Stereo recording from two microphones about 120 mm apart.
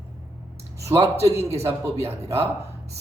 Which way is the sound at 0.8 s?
25° right (ahead or behind).